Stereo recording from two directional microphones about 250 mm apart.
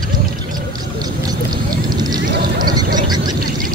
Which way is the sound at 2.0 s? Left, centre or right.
Centre.